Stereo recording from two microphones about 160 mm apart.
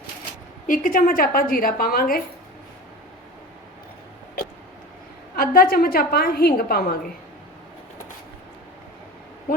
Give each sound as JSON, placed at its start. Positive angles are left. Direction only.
{"t": 0.7, "sound": "a woman's voice", "side_deg": 60}
{"t": 5.4, "sound": "a woman's voice", "side_deg": 70}